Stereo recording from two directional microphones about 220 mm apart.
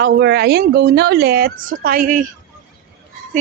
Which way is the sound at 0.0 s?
50° right (ahead or behind).